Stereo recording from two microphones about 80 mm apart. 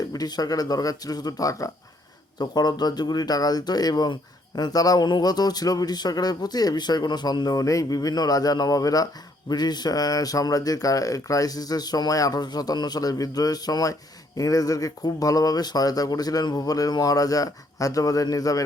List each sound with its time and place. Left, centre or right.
0.1 s a man's voice: left
2.4 s speech: left
5.0 s speech: left
9.5 s a man's voice: left